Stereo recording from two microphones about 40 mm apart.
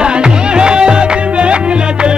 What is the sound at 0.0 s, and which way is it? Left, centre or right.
Music, right.